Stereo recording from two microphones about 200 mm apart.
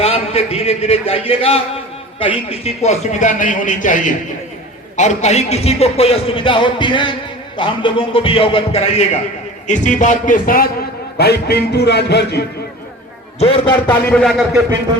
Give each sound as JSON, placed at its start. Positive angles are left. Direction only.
{"t": 0.0, "sound": "a man's voice", "side_deg": 30}
{"t": 13.4, "sound": "speech", "side_deg": 25}
{"t": 14.1, "sound": "a man's voice", "side_deg": 0}